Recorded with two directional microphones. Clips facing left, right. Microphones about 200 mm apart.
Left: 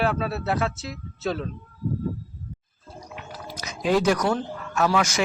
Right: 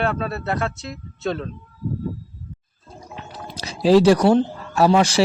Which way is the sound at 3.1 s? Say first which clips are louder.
Right 3 dB; 30° right (ahead or behind).